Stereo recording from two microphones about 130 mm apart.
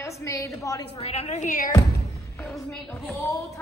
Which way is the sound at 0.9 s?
50° left (ahead or behind).